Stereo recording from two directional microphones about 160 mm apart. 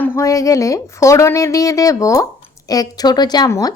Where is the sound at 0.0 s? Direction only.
15° left (ahead or behind).